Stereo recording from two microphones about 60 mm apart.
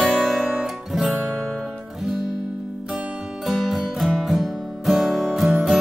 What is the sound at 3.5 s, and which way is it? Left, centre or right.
Music, centre.